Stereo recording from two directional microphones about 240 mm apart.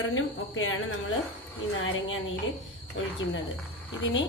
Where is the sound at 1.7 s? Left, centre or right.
Left.